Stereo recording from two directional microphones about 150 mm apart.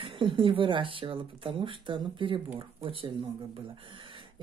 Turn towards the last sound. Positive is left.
turn(degrees=-35)  # may be behind; listen again after turning